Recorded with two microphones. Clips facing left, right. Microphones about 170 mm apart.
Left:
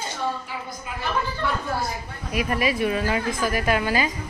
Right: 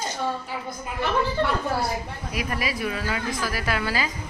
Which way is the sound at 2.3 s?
25° left (ahead or behind).